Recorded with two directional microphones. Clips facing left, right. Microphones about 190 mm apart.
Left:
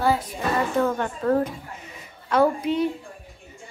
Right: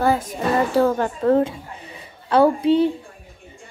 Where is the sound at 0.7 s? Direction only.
35° right (ahead or behind).